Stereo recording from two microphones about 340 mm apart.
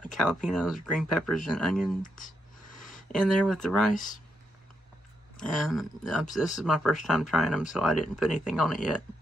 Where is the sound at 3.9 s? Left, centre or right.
Left.